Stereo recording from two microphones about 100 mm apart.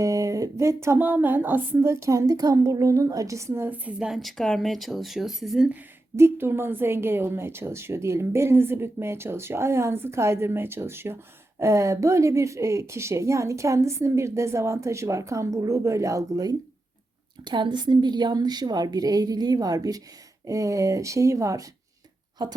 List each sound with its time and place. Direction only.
0.0 s a woman's voice: 35° right (ahead or behind); by 4.1 s 15° right (ahead or behind)
4.1 s speech: centre (ahead or behind)
6.1 s a woman's voice: 25° right (ahead or behind)
22.4 s a woman's voice: 45° right (ahead or behind)